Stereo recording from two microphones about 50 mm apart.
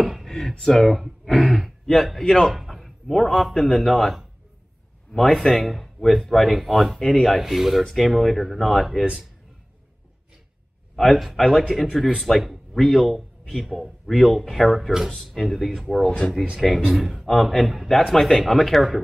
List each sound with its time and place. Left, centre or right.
0.0 s a sound: centre
1.3 s throat clearing: centre
1.6 s a man's voice: centre
11.0 s speech: centre
16.1 s speech: left
16.9 s speech: centre